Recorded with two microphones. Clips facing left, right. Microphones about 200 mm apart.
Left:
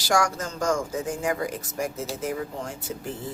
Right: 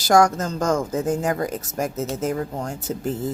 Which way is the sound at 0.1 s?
40° right (ahead or behind).